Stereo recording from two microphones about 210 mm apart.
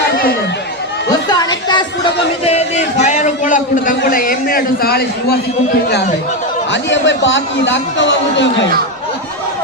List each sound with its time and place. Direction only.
1.3 s a woman's voice: 20° left (ahead or behind)
2.4 s a man's voice: 30° left (ahead or behind); by 5.4 s 50° left (ahead or behind)
6.9 s a man's voice: 60° left (ahead or behind)